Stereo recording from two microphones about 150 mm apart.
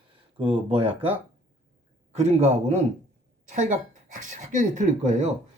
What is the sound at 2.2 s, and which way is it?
Speech, 50° right (ahead or behind).